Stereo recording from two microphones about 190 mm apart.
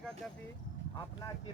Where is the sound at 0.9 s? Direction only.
20° left (ahead or behind).